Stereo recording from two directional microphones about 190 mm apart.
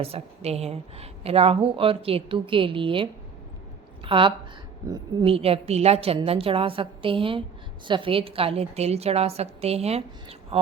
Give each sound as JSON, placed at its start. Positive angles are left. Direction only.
{"t": 0.0, "sound": "a woman's voice", "side_deg": -30}